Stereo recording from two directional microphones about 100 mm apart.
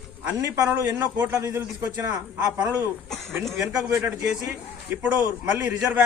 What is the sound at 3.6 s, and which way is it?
A man's voice, 5° right (ahead or behind).